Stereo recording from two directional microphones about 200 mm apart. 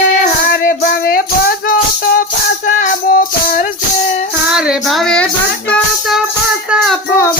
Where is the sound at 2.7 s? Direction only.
40° left (ahead or behind).